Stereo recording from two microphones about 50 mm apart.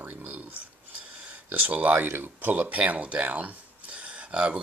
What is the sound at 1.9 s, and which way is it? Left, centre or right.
Speech, right.